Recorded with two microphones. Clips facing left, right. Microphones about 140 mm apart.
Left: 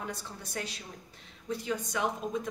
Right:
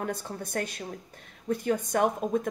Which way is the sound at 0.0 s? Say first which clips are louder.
Right 7 dB; 50° right (ahead or behind).